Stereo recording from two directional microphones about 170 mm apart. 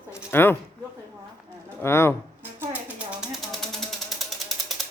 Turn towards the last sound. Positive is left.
turn(degrees=0)  # may be behind; listen again after turning